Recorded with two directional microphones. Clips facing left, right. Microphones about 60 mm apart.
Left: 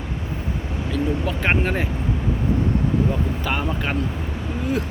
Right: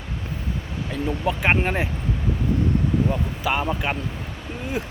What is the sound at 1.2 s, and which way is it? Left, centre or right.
Speech, centre.